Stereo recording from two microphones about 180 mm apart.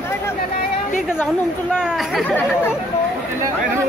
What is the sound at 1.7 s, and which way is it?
Speech, 5° right (ahead or behind).